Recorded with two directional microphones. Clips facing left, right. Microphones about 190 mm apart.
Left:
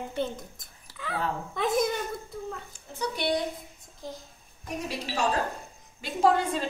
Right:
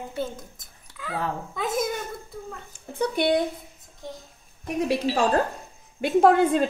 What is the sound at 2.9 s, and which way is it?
Speech, 55° right (ahead or behind).